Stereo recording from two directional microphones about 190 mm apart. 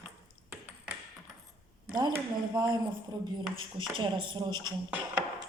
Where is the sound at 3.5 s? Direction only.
25° right (ahead or behind).